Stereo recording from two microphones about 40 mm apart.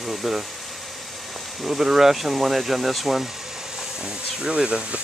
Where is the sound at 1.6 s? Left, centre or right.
Centre.